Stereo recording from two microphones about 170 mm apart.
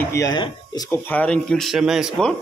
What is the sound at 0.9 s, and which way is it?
Speech, 10° left (ahead or behind).